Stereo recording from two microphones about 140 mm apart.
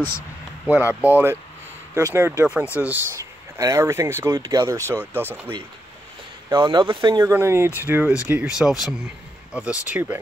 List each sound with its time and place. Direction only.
0.7 s speech: 15° right (ahead or behind)
6.5 s speech: 35° right (ahead or behind)
7.2 s speech: 20° right (ahead or behind)